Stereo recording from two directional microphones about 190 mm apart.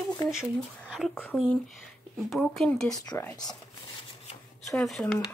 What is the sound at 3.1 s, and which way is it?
Speech, 15° left (ahead or behind).